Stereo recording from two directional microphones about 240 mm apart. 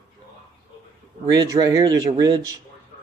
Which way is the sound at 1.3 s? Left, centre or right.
Centre.